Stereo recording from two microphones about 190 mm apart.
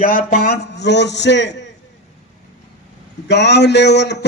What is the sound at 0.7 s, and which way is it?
Speech, 65° left (ahead or behind).